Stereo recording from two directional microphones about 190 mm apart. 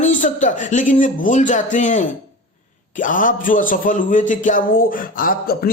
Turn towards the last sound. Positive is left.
turn(degrees=50)  # may be behind; listen again after turning